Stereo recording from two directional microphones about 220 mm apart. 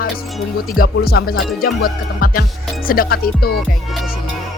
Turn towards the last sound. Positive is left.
turn(degrees=45)  # may be behind; listen again after turning